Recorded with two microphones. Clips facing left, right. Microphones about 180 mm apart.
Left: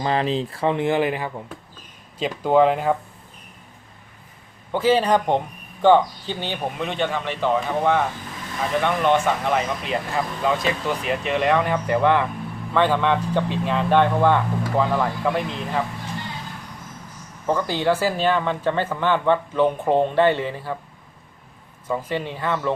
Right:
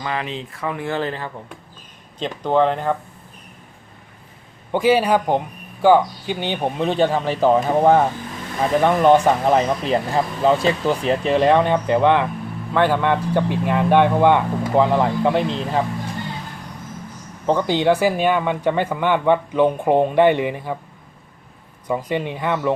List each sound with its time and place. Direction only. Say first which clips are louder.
0.0 s speech: left 5 dB; 35° left (ahead or behind); by 3.0 s 5° left (ahead or behind)
4.7 s speech: right 2 dB; 15° right (ahead or behind)
6.6 s speech: right 8 dB; 30° right (ahead or behind)
17.4 s speech: right 4 dB; 20° right (ahead or behind)
21.8 s speech: right 3 dB; 15° right (ahead or behind)